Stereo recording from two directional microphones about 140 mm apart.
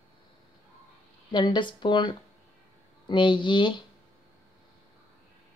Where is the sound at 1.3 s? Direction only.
35° left (ahead or behind).